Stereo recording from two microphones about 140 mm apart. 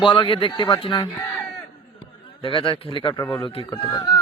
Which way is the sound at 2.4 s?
40° left (ahead or behind).